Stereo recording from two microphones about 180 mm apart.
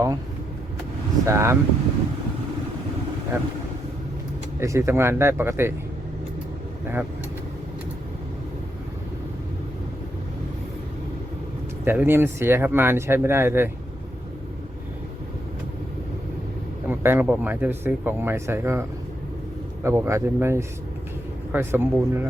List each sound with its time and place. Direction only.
1.2 s speech: 15° right (ahead or behind)
3.3 s speech: 15° right (ahead or behind)
4.6 s speech: 15° right (ahead or behind)
11.9 s speech: 10° right (ahead or behind)
16.9 s speech: 10° right (ahead or behind)